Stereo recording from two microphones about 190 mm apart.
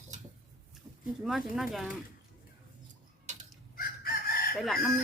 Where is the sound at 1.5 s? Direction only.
Centre (ahead or behind).